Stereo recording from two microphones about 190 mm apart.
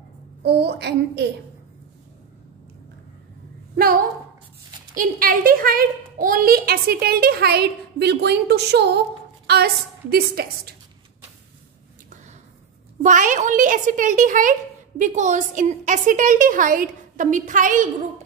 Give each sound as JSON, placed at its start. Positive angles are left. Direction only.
{"t": 0.4, "sound": "a child's voice", "side_deg": -60}
{"t": 3.7, "sound": "a woman's voice", "side_deg": -50}
{"t": 13.0, "sound": "a woman's voice", "side_deg": -40}